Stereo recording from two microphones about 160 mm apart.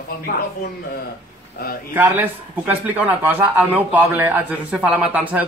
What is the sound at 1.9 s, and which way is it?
A man's voice, 10° right (ahead or behind).